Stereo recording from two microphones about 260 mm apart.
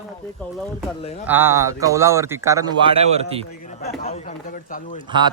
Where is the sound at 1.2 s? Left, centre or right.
Centre.